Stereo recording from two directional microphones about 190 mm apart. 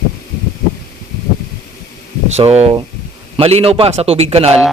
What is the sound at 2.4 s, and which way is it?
Speech, 35° right (ahead or behind).